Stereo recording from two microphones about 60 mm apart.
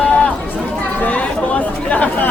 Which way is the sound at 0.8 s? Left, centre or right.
Left.